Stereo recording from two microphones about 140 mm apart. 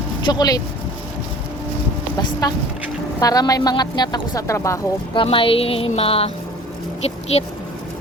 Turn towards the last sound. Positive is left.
turn(degrees=50)  # may be behind; listen again after turning